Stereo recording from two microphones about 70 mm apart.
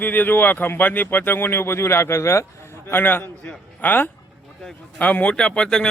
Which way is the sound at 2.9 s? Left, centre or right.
Left.